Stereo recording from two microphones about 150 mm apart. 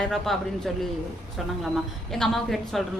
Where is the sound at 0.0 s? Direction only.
Centre (ahead or behind).